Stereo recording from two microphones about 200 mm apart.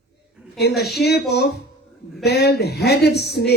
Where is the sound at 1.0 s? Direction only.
55° left (ahead or behind).